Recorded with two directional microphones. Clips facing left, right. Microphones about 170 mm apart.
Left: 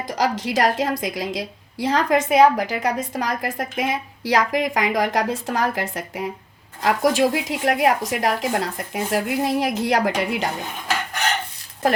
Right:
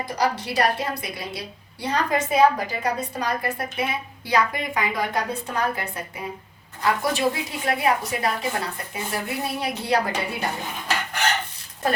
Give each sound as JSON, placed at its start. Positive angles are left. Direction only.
{"t": 0.2, "sound": "a woman's voice", "side_deg": 90}